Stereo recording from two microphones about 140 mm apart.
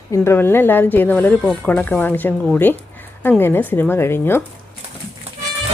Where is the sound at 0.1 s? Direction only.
15° left (ahead or behind).